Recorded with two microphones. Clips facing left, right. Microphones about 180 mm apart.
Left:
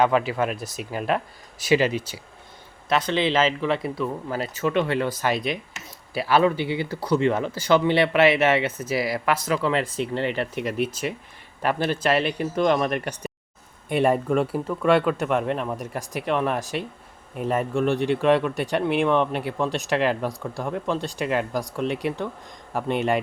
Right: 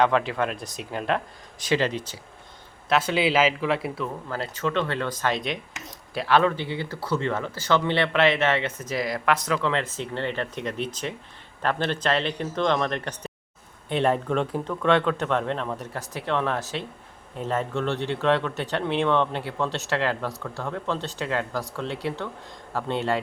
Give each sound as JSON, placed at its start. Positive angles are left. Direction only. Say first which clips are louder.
{"t": 0.0, "sound": "speech", "louder": "left 1 dB", "side_deg": 5}
{"t": 2.9, "sound": "speech", "louder": "even", "side_deg": -10}
{"t": 4.3, "sound": "speech", "louder": "left 1 dB", "side_deg": 10}